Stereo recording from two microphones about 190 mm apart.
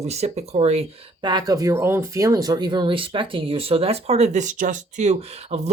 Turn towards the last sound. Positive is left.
turn(degrees=-35)  # may be behind; listen again after turning